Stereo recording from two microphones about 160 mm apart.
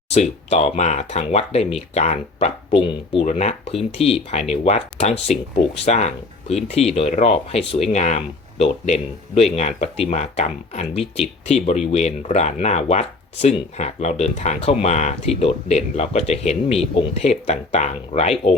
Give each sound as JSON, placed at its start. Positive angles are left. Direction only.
{"t": 0.1, "sound": "speech", "side_deg": 40}